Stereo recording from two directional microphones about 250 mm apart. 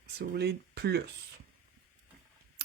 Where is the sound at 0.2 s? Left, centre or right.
Right.